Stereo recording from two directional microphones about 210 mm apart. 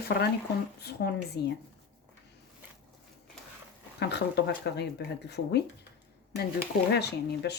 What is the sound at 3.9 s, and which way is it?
Speech, 50° left (ahead or behind).